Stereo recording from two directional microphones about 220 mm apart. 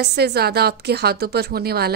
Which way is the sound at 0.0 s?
50° right (ahead or behind).